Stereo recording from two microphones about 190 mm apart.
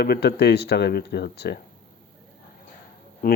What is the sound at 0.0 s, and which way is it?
Speech, 60° left (ahead or behind).